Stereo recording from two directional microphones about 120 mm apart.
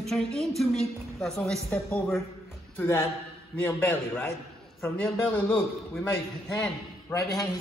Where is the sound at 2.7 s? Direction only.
20° left (ahead or behind).